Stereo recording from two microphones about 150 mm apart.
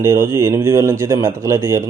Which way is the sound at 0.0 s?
20° right (ahead or behind).